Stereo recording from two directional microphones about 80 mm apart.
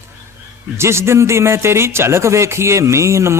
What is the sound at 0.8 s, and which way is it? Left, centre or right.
Speech, right.